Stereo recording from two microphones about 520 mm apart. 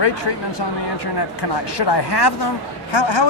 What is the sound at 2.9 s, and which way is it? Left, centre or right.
Speech, left.